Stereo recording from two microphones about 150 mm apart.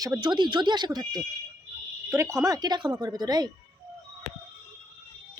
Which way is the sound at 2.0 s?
20° right (ahead or behind).